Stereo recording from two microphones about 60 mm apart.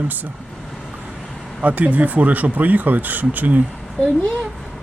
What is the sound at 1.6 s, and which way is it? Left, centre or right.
Speech, right.